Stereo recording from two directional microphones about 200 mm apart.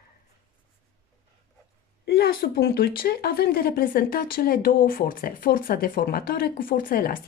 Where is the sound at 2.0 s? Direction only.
55° left (ahead or behind).